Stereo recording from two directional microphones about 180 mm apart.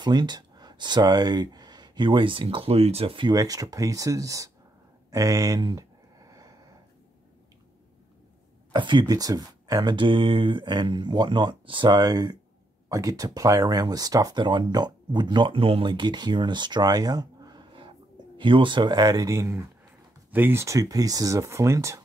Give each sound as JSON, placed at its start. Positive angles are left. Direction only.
{"t": 0.0, "sound": "speech", "side_deg": -25}
{"t": 5.1, "sound": "a sound", "side_deg": -20}
{"t": 8.7, "sound": "speech", "side_deg": -25}